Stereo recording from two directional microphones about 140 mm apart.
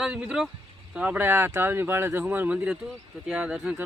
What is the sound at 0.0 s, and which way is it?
Speech, 5° right (ahead or behind).